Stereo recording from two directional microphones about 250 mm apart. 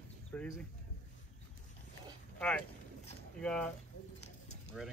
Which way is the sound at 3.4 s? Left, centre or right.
Centre.